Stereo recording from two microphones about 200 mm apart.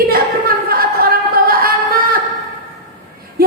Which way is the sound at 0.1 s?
45° right (ahead or behind).